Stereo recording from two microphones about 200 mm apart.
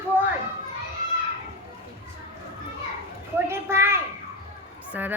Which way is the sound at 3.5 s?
10° right (ahead or behind).